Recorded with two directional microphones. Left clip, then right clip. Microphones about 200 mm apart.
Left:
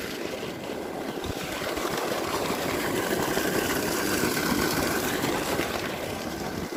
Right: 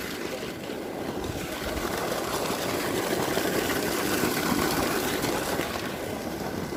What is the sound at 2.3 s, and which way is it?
Vehicle, 30° left (ahead or behind).